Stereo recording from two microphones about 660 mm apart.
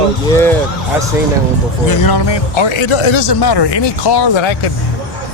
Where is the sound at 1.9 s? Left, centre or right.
Left.